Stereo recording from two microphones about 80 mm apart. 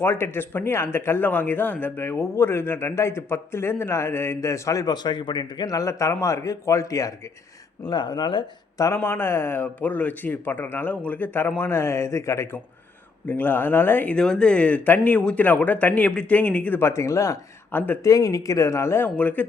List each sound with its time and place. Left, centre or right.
0.0 s speech: left
5.0 s speech: left
5.6 s a man's voice: left
7.9 s speech: left
9.0 s speech: left
13.2 s speech: left
14.2 s speech: centre
16.9 s speech: left
17.7 s speech: left
18.0 s speech: left
19.1 s speech: left